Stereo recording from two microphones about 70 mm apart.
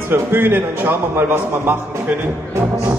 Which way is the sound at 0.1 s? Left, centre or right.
Right.